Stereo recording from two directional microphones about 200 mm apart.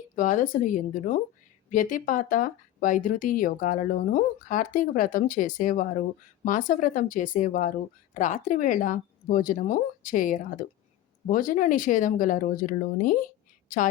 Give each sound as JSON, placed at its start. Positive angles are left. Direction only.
{"t": 0.2, "sound": "speech", "side_deg": 40}